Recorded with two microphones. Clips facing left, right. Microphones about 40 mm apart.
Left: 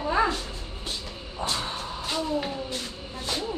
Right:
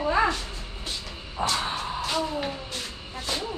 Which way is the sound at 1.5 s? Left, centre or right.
Right.